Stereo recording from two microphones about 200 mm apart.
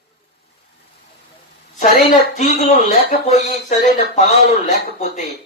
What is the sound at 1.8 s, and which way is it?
Speech, 40° left (ahead or behind).